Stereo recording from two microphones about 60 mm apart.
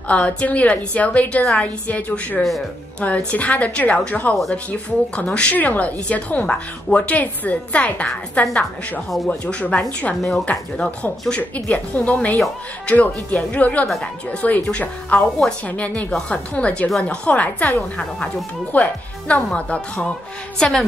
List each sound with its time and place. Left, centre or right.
0.1 s a woman's voice: left